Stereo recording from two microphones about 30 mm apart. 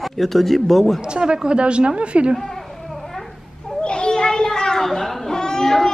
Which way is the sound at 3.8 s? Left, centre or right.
Left.